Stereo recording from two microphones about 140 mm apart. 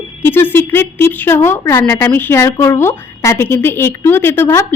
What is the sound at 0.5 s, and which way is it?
A woman's voice, 15° left (ahead or behind).